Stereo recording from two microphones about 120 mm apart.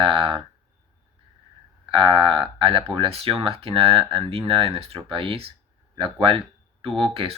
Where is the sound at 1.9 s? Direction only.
45° right (ahead or behind).